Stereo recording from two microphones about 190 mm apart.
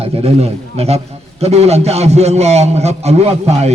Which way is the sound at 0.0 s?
30° right (ahead or behind).